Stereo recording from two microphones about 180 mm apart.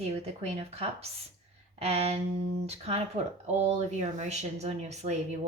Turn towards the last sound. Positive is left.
turn(degrees=-40)  # may be behind; listen again after turning